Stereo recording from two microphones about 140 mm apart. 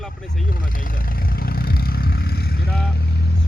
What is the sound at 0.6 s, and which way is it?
Vehicle, 90° left.